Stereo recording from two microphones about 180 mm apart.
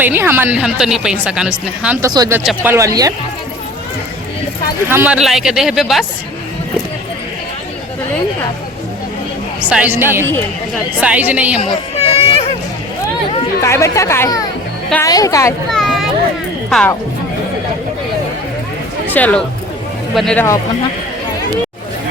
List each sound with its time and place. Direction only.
0.0 s speech: 10° right (ahead or behind)
2.0 s speech: 20° right (ahead or behind)
2.4 s speech: centre (ahead or behind)
2.7 s speech: 20° right (ahead or behind)
4.9 s speech: 10° right (ahead or behind)
9.6 s speech: 10° right (ahead or behind)
11.6 s a sound: 35° left (ahead or behind)
13.6 s a woman's voice: 15° left (ahead or behind)
15.7 s a sound: centre (ahead or behind)
16.6 s speech: 5° left (ahead or behind)
19.0 s speech: 10° left (ahead or behind)